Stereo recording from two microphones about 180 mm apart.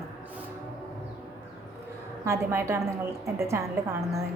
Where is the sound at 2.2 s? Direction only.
15° right (ahead or behind).